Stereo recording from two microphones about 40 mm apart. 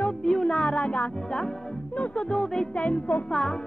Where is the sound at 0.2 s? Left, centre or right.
Centre.